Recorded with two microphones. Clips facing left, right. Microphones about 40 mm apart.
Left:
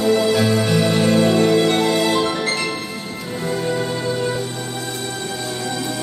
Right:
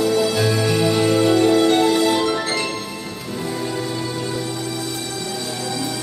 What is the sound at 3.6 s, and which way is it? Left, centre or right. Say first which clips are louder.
Music: left 3 dB; left.